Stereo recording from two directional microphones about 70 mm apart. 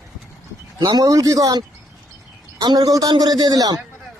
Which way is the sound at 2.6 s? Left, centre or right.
Right.